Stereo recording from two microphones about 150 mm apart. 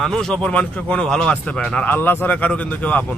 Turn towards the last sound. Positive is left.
turn(degrees=10)  # may be behind; listen again after turning